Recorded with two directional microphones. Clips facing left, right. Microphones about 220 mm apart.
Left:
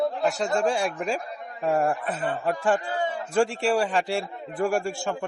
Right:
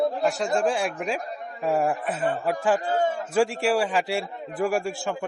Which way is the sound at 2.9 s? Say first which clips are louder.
Right 5 dB; 45° right (ahead or behind).